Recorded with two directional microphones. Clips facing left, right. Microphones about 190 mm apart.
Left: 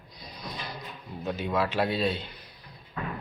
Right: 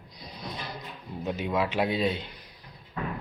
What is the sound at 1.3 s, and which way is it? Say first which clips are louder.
Speech: even; 15° right (ahead or behind).